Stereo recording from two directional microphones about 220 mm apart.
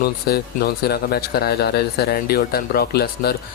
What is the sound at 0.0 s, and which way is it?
A man's voice, 45° left (ahead or behind).